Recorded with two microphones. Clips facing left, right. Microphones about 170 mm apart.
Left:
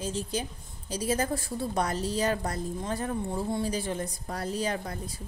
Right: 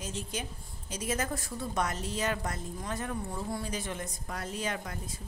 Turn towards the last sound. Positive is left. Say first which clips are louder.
# left 4 dB
turn(degrees=35)  # may be behind; listen again after turning